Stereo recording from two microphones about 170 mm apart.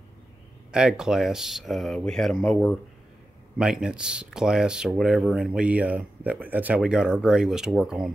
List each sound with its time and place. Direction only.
0.7 s speech: 5° right (ahead or behind)